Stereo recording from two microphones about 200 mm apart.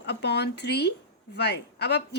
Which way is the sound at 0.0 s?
55° left (ahead or behind).